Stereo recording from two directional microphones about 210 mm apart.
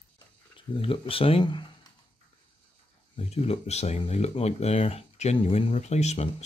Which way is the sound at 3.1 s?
30° left (ahead or behind).